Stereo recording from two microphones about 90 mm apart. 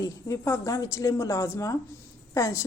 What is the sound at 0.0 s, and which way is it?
A woman's voice, 30° left (ahead or behind).